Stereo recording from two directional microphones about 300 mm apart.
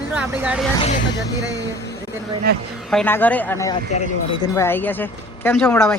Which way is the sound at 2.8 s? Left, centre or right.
Centre.